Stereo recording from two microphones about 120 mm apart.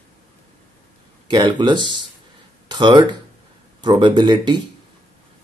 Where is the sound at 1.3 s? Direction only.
40° right (ahead or behind).